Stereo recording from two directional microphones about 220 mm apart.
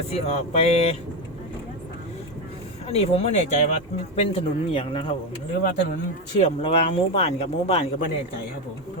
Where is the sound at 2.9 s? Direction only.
30° left (ahead or behind).